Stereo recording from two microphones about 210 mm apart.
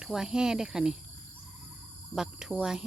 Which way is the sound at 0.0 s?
Centre (ahead or behind).